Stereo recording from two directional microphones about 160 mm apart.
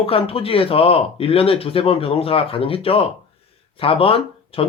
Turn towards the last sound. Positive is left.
turn(degrees=35)  # may be behind; listen again after turning